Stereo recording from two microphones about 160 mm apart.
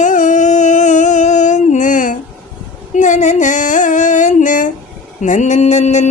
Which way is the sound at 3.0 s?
50° left (ahead or behind).